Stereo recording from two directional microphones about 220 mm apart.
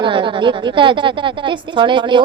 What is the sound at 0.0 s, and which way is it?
A woman's voice, 20° right (ahead or behind).